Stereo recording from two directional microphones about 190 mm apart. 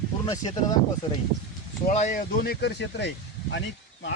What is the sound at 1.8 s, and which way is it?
Speech, 40° left (ahead or behind).